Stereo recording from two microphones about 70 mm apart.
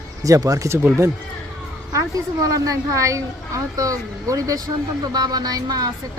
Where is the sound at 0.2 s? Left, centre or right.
Right.